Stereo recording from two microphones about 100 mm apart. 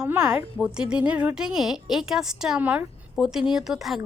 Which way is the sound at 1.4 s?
5° right (ahead or behind).